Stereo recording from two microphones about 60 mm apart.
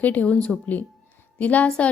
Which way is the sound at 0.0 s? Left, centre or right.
Left.